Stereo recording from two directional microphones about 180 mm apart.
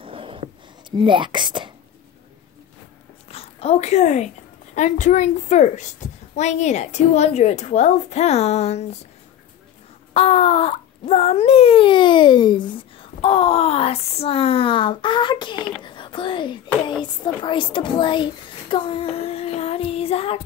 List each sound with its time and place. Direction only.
0.0 s whispering: 30° right (ahead or behind)
3.3 s a sound: 35° left (ahead or behind)
4.7 s a woman's voice: 45° left (ahead or behind)
10.1 s a woman's voice: 35° left (ahead or behind)